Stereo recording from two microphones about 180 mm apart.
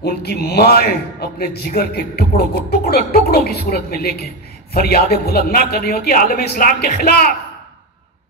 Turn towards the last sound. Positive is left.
turn(degrees=55)  # may be behind; listen again after turning